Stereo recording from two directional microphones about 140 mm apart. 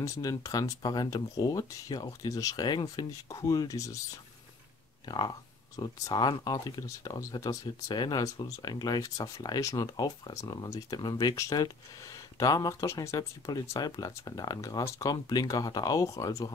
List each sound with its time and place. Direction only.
0.0 s speech: 25° left (ahead or behind)
5.0 s speech: 30° left (ahead or behind)